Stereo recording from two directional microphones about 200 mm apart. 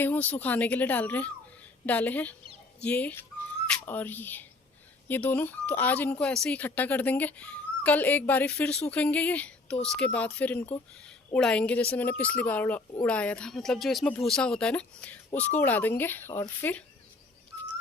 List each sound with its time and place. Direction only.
0.0 s speech: 10° left (ahead or behind)